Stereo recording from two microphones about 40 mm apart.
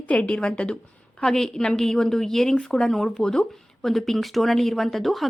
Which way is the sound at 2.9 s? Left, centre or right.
Centre.